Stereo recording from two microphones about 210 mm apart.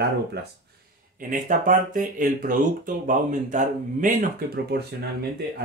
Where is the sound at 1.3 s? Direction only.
40° right (ahead or behind).